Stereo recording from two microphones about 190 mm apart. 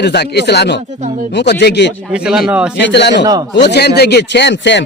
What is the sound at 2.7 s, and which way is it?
A man's voice, 65° left (ahead or behind).